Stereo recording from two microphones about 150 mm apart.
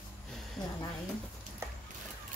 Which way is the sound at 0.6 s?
25° left (ahead or behind).